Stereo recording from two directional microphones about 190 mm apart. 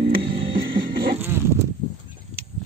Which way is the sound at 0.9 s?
50° right (ahead or behind).